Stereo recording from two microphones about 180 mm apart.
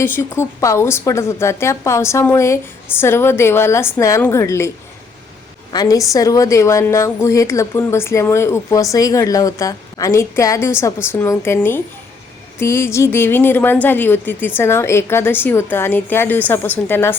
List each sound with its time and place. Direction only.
0.0 s a woman's voice: 15° left (ahead or behind)
5.7 s a woman's voice: 20° left (ahead or behind)